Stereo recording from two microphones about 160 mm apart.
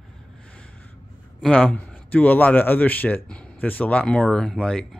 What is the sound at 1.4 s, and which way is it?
Speech, 5° left (ahead or behind).